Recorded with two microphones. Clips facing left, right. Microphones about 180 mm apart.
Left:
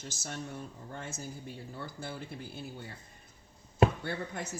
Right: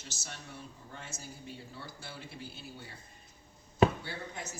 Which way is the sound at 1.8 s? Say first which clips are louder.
Left 6 dB; 50° left (ahead or behind).